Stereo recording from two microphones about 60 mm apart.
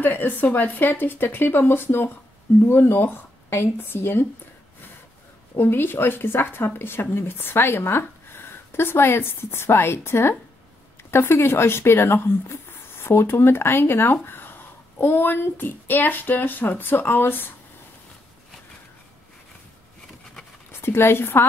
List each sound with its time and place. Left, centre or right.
0.0 s speech: left
5.6 s a child's voice: left
20.8 s speech: left